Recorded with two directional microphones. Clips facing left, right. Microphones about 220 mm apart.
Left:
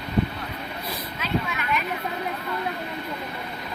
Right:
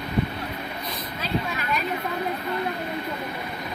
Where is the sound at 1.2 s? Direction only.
35° right (ahead or behind).